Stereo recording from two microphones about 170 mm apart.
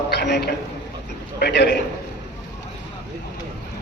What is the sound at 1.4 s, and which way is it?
Speech, 80° left.